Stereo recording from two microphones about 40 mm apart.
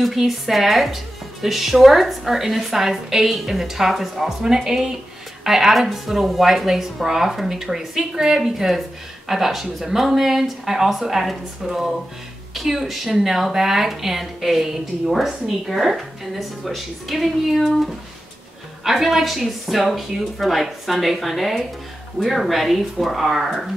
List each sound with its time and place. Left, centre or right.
0.0 s speech: centre